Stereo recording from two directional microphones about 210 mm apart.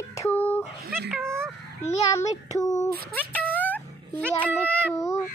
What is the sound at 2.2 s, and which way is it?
Child singing, 35° left (ahead or behind).